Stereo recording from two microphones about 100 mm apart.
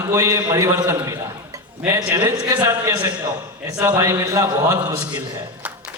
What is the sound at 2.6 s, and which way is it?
A man's voice, 30° right (ahead or behind).